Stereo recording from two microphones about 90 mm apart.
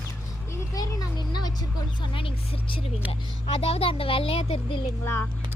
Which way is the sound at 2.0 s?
75° left (ahead or behind).